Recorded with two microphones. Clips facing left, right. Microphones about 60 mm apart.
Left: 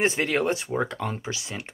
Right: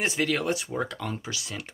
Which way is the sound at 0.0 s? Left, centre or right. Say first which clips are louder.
Left 3 dB; left.